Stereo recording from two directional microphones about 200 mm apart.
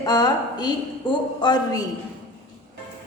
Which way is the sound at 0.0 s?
20° left (ahead or behind).